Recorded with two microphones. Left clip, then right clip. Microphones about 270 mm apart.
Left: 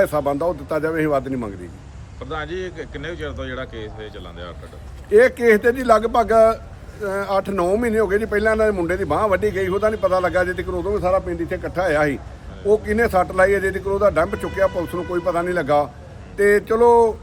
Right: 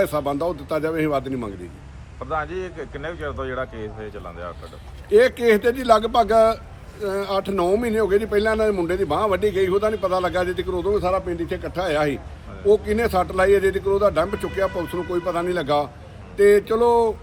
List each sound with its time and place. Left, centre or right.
0.0 s speech: centre
2.3 s speech: centre
5.1 s speech: centre